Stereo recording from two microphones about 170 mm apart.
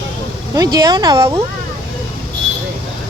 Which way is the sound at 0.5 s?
20° right (ahead or behind).